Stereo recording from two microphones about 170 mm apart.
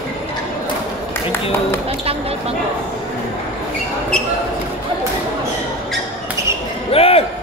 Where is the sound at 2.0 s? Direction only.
35° right (ahead or behind).